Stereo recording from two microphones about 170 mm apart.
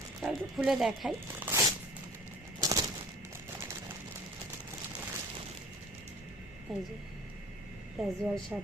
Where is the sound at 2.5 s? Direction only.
20° right (ahead or behind).